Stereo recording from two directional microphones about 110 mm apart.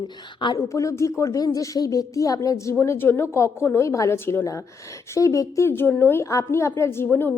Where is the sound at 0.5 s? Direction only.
30° left (ahead or behind).